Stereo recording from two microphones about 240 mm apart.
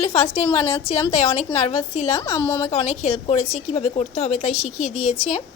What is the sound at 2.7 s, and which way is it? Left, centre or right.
A woman's voice, left.